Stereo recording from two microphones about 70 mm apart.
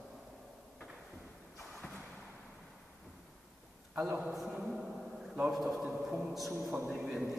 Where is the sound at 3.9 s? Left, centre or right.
Right.